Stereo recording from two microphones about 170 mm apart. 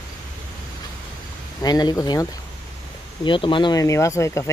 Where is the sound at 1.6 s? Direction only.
25° left (ahead or behind).